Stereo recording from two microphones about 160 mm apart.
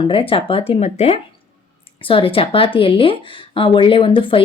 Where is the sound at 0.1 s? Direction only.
35° left (ahead or behind).